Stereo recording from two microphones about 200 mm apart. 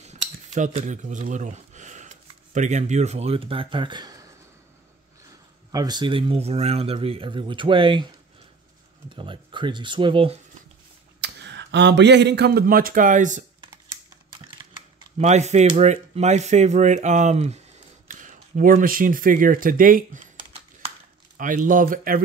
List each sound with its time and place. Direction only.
0.0 s speech: 35° right (ahead or behind)
5.7 s speech: 20° right (ahead or behind)
9.1 s speech: 25° right (ahead or behind)
11.1 s speech: 60° right (ahead or behind); by 13.4 s 40° right (ahead or behind)
15.1 s speech: 35° right (ahead or behind)
21.4 s speech: 40° right (ahead or behind)